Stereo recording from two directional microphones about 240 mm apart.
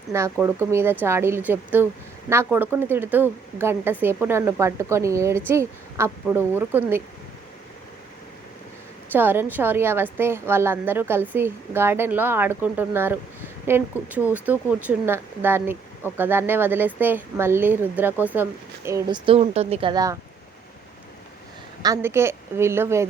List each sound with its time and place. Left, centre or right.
0.1 s a woman's voice: centre
9.1 s a woman's voice: centre
21.8 s a woman's voice: centre